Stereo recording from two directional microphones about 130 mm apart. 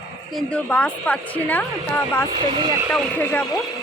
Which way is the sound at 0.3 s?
10° left (ahead or behind).